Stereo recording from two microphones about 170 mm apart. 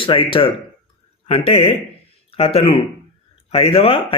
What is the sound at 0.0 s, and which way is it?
A man's voice, 30° left (ahead or behind).